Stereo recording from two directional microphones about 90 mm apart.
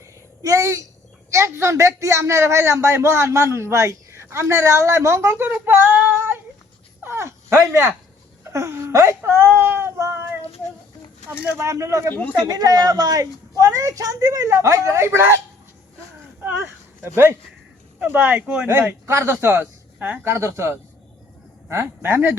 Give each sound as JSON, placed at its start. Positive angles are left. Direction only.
{"t": 0.0, "sound": "a sound", "side_deg": -35}
{"t": 1.3, "sound": "speech", "side_deg": -30}
{"t": 7.0, "sound": "wail", "side_deg": -30}
{"t": 8.4, "sound": "speech", "side_deg": -30}
{"t": 11.3, "sound": "speech", "side_deg": -30}
{"t": 17.0, "sound": "speech", "side_deg": -30}